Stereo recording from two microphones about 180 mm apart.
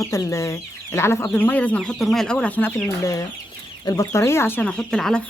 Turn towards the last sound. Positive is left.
turn(degrees=5)  # may be behind; listen again after turning